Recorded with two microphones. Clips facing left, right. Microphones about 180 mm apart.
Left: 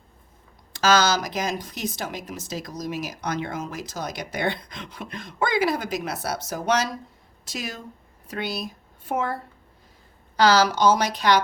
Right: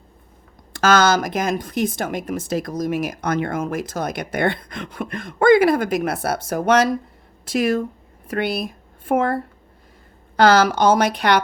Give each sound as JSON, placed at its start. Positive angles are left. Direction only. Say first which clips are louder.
{"t": 0.7, "sound": "speech", "louder": "right 4 dB", "side_deg": -55}